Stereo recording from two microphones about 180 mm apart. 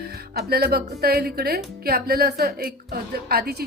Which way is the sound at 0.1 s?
60° right (ahead or behind).